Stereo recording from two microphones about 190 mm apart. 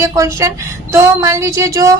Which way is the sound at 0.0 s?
15° right (ahead or behind).